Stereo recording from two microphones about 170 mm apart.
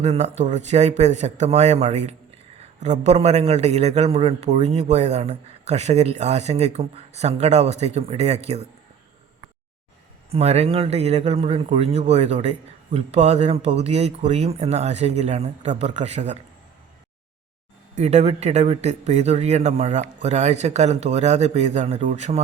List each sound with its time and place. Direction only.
0.0 s speech: 40° right (ahead or behind)
10.3 s speech: 40° right (ahead or behind)
17.9 s speech: 40° right (ahead or behind)